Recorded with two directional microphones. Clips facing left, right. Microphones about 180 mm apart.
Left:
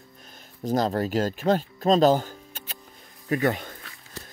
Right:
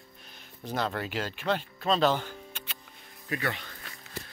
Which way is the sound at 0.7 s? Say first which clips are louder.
Left 8 dB; 40° left (ahead or behind).